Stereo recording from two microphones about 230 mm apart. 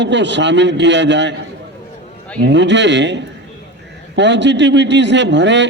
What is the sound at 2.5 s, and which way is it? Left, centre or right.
A man's voice, right.